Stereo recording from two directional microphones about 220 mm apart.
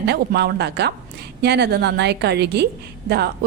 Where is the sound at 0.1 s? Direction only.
50° right (ahead or behind).